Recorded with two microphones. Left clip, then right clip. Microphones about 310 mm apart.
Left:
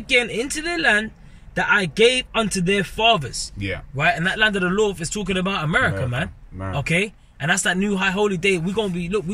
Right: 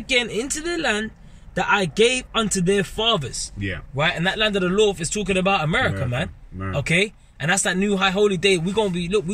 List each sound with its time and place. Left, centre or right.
0.0 s speech: centre
3.5 s speech: centre
4.2 s speech: centre